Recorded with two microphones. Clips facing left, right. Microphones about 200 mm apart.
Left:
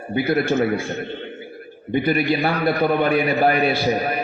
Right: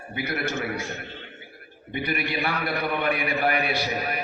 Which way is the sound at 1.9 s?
30° left (ahead or behind).